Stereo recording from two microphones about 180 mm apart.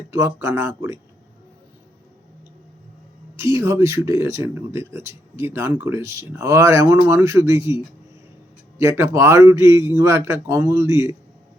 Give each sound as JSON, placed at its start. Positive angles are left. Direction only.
{"t": 0.1, "sound": "speech", "side_deg": -15}
{"t": 3.3, "sound": "speech", "side_deg": -15}
{"t": 8.8, "sound": "speech", "side_deg": -15}